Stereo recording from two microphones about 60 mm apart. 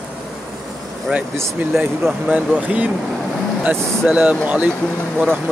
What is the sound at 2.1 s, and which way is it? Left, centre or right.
Speech, right.